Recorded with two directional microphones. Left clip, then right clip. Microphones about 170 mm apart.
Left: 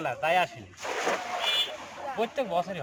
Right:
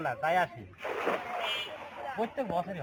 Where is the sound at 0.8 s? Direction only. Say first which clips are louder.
Left 3 dB; 25° right (ahead or behind).